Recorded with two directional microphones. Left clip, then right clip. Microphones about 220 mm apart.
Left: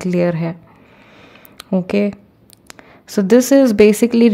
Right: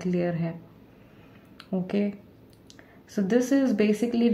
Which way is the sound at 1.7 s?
45° left (ahead or behind).